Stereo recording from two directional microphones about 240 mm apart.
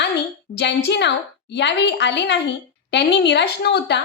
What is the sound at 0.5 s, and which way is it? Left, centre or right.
A woman's voice, left.